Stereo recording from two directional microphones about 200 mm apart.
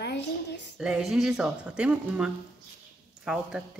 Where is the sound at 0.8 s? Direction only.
5° right (ahead or behind).